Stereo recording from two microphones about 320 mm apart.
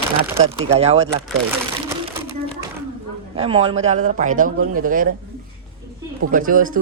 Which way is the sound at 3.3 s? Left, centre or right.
Centre.